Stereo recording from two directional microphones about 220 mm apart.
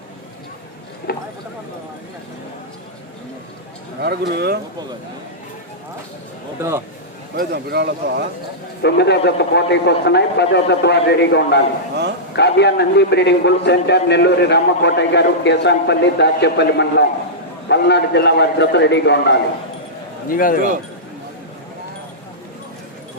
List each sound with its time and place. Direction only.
1.1 s a sound: 45° left (ahead or behind)
4.0 s speech: 50° right (ahead or behind)
6.6 s a man's voice: 10° right (ahead or behind)
7.3 s speech: 45° right (ahead or behind)
8.8 s a man's voice: 50° left (ahead or behind)
20.3 s speech: 40° left (ahead or behind)